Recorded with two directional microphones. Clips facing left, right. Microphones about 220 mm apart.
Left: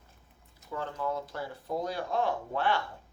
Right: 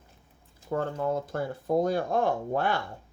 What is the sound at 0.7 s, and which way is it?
Speech, 50° right (ahead or behind).